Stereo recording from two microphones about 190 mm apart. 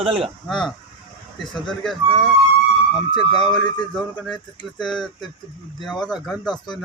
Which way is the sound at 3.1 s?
25° left (ahead or behind).